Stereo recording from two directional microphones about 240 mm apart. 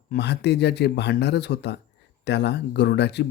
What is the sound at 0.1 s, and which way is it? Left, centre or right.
Speech, left.